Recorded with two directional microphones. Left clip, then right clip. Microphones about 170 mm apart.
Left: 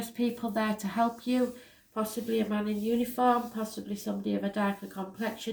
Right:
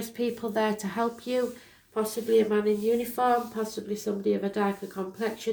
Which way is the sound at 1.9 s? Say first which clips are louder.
Right 7 dB; 50° right (ahead or behind).